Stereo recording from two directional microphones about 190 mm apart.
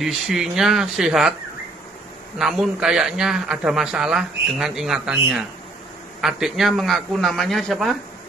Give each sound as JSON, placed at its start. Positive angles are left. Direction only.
{"t": 0.0, "sound": "a man's voice", "side_deg": 0}
{"t": 2.3, "sound": "a man's voice", "side_deg": 0}